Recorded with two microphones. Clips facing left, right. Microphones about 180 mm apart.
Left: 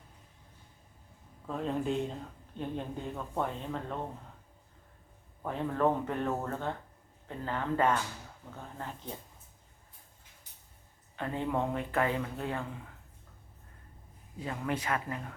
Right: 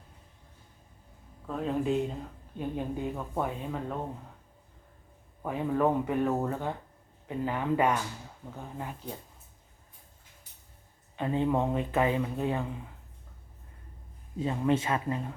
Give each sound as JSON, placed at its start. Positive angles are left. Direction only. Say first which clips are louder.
{"t": 1.5, "sound": "speech", "louder": "right 3 dB", "side_deg": 0}
{"t": 5.4, "sound": "speech", "louder": "right 2 dB", "side_deg": -10}
{"t": 11.2, "sound": "speech", "louder": "right 5 dB", "side_deg": -20}
{"t": 14.3, "sound": "speech", "louder": "right 7 dB", "side_deg": -20}